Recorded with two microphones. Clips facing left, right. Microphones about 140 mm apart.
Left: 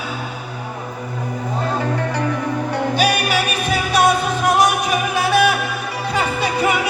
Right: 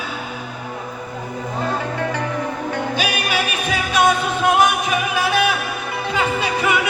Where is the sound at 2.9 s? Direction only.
35° left (ahead or behind).